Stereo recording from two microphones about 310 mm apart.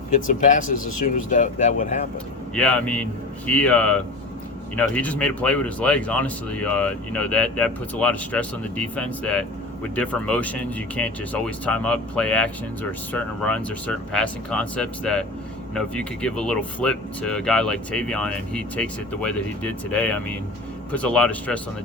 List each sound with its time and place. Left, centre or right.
0.1 s speech: left
2.6 s speech: centre